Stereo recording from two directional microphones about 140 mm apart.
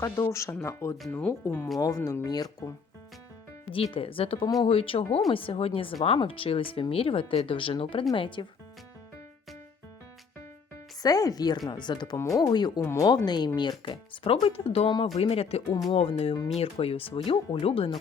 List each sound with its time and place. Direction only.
0.0 s speech: 20° left (ahead or behind)
1.8 s speech: 20° left (ahead or behind)
3.7 s speech: 40° left (ahead or behind)
11.0 s speech: 25° left (ahead or behind)
12.8 s speech: 20° left (ahead or behind)
13.2 s speech: 30° left (ahead or behind)